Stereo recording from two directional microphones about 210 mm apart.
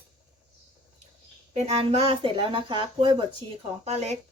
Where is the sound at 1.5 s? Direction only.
30° right (ahead or behind).